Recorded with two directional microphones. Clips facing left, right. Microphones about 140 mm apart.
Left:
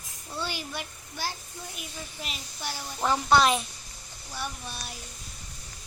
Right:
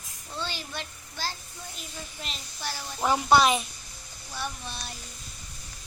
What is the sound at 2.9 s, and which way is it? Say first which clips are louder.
Speech: right 1 dB; 10° right (ahead or behind).